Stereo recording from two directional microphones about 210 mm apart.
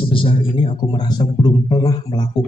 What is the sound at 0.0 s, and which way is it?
Speech, 25° left (ahead or behind).